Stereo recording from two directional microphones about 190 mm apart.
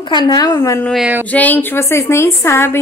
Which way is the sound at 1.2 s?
10° left (ahead or behind).